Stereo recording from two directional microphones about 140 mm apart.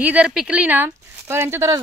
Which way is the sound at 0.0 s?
10° right (ahead or behind).